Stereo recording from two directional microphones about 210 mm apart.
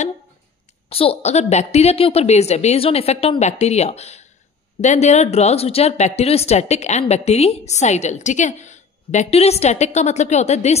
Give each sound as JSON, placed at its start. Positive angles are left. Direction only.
{"t": 0.8, "sound": "speech", "side_deg": 25}